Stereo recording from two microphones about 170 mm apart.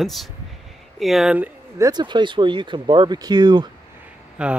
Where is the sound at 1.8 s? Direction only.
25° right (ahead or behind).